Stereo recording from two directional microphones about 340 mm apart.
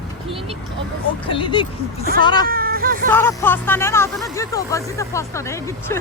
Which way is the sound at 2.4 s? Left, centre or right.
Right.